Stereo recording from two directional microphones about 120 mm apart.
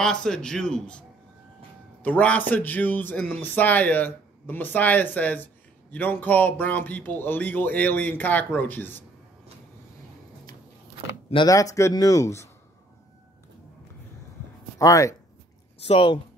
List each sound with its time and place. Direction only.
0.0 s a man's voice: 5° left (ahead or behind)
2.0 s speech: 10° left (ahead or behind)
11.4 s speech: 30° left (ahead or behind)
14.8 s speech: 25° left (ahead or behind)
15.9 s speech: 45° left (ahead or behind)